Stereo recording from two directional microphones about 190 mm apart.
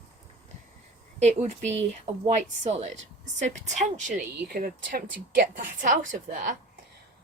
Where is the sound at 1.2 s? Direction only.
40° right (ahead or behind).